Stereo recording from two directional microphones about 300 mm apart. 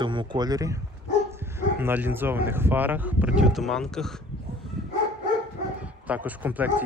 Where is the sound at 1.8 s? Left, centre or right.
Centre.